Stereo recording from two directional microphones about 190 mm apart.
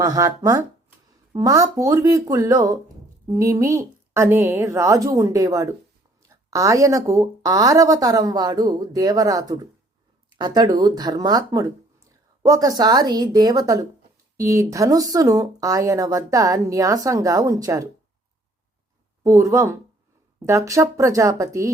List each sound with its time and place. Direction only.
0.0 s speech: 20° right (ahead or behind)
19.2 s speech: 15° right (ahead or behind)